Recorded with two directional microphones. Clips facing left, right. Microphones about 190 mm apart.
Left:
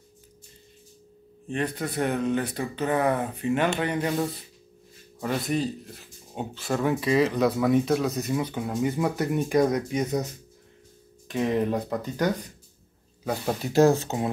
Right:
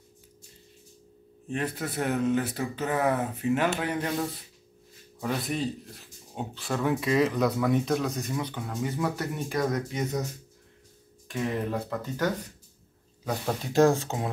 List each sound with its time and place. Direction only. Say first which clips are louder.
1.5 s speech: left 2 dB; 5° right (ahead or behind)
5.2 s speech: left 3 dB; centre (ahead or behind); by 10.2 s 15° left (ahead or behind)
11.2 s speech: left 5 dB; 20° left (ahead or behind); by 14.3 s 5° left (ahead or behind)